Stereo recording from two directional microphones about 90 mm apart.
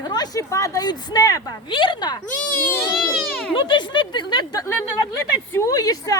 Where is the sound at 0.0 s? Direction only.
50° left (ahead or behind).